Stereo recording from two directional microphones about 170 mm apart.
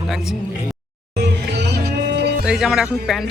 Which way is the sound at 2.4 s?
5° right (ahead or behind).